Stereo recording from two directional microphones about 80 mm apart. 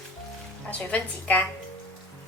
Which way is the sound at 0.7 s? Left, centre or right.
Centre.